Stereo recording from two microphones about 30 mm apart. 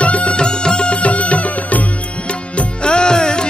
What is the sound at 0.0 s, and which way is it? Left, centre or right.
Music, left.